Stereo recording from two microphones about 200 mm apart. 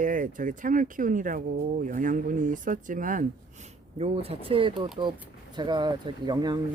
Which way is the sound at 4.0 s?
30° right (ahead or behind).